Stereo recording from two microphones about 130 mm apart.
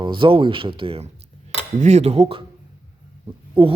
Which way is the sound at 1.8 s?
60° right (ahead or behind).